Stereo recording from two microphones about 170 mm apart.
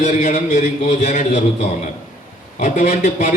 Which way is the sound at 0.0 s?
50° left (ahead or behind).